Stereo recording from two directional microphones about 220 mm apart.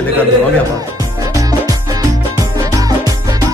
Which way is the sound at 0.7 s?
15° right (ahead or behind).